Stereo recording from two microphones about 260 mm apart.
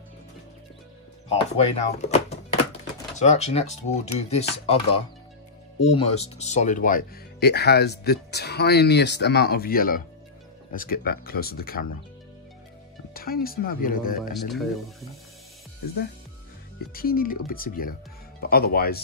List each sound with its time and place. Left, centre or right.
1.3 s speech: left
13.1 s speech: left
14.3 s speech: centre
16.9 s speech: left